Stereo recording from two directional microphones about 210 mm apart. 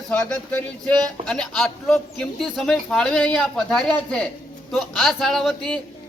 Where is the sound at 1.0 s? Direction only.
20° right (ahead or behind).